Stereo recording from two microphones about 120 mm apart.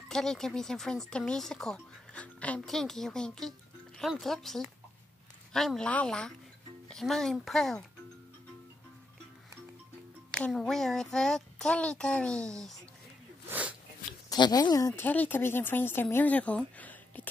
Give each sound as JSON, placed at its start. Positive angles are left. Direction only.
{"t": 0.1, "sound": "speech", "side_deg": 5}
{"t": 10.3, "sound": "speech", "side_deg": 5}
{"t": 13.5, "sound": "sneeze", "side_deg": -10}
{"t": 14.3, "sound": "speech", "side_deg": 35}
{"t": 15.0, "sound": "speech", "side_deg": 15}